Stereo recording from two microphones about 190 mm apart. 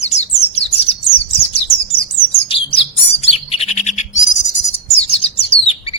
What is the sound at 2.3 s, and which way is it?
Bird, 30° left (ahead or behind).